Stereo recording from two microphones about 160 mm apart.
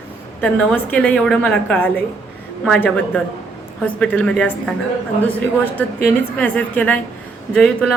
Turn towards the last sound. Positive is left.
turn(degrees=5)  # may be behind; listen again after turning